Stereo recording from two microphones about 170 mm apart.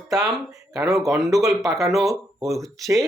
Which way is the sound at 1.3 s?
20° right (ahead or behind).